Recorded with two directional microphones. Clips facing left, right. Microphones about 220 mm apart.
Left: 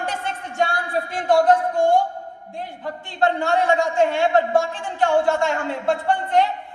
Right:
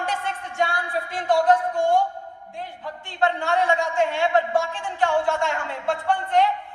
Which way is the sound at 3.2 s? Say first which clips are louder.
Left 3 dB; 45° left (ahead or behind).